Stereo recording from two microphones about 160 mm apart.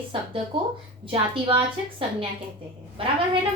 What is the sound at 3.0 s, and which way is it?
Speech, 35° right (ahead or behind).